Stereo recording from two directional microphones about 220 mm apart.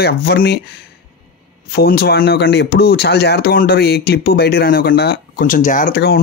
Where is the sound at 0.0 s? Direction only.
45° left (ahead or behind).